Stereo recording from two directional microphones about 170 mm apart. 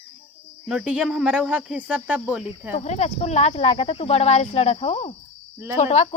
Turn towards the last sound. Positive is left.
turn(degrees=40)  # may be behind; listen again after turning